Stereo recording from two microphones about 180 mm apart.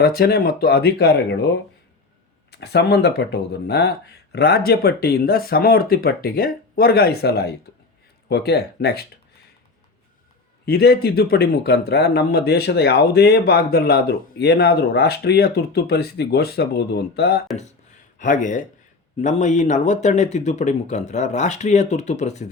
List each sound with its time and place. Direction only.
0.0 s speech: 60° left (ahead or behind)
2.5 s speech: 65° left (ahead or behind)
10.7 s speech: 60° left (ahead or behind)
18.2 s speech: 45° left (ahead or behind)